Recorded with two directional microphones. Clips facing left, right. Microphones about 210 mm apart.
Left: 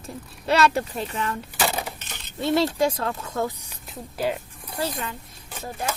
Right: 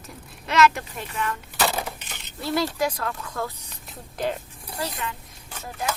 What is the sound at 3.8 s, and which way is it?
Speech, 5° left (ahead or behind).